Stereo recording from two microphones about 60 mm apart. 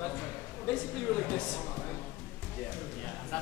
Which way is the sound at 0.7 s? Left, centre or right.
Centre.